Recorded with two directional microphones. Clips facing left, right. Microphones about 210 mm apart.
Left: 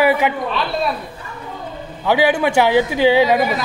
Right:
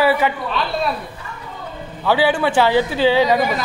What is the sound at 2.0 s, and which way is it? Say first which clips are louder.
Speech: left 1 dB; 15° left (ahead or behind).